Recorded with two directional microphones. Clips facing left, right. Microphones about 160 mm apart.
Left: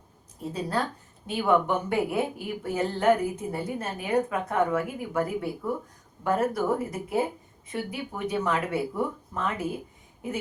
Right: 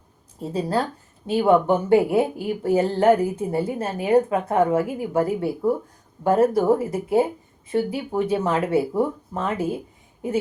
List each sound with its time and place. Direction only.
0.4 s a woman's voice: 30° right (ahead or behind)